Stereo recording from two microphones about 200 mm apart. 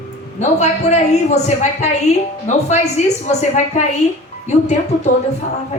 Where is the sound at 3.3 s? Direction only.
35° left (ahead or behind).